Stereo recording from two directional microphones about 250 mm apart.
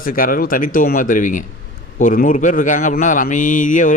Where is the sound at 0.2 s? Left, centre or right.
Left.